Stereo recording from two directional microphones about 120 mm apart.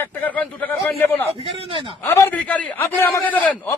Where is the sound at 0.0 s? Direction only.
15° left (ahead or behind).